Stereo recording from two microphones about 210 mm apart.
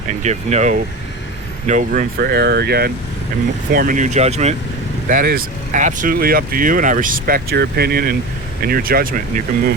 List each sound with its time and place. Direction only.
0.1 s speech: 35° right (ahead or behind)
5.0 s speech: 40° right (ahead or behind)